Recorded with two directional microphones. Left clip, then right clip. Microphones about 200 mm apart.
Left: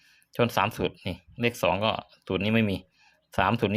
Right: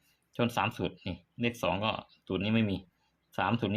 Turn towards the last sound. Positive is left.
turn(degrees=25)  # may be behind; listen again after turning